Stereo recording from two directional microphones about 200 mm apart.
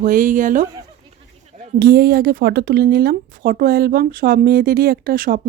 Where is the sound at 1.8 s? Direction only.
50° right (ahead or behind).